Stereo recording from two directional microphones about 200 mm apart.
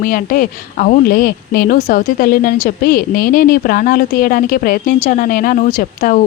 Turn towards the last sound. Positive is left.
turn(degrees=40)  # may be behind; listen again after turning